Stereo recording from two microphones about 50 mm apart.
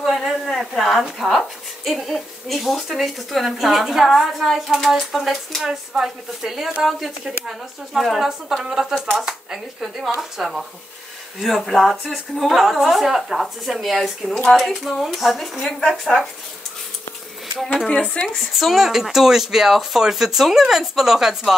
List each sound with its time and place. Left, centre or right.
0.0 s a sound: centre
1.9 s a woman's voice: centre
17.8 s speech: left
18.4 s speech: centre